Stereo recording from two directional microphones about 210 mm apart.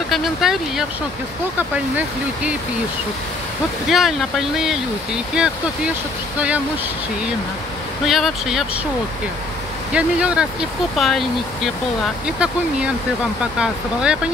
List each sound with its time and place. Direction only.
0.1 s speech: centre (ahead or behind)
3.9 s speech: centre (ahead or behind)
8.0 s speech: centre (ahead or behind)
9.9 s speech: 5° right (ahead or behind)
13.4 s speech: 5° right (ahead or behind)